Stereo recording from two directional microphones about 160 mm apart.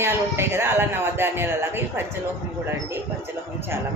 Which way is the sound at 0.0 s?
15° right (ahead or behind).